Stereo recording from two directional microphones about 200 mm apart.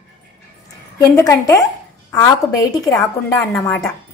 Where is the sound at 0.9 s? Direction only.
15° left (ahead or behind).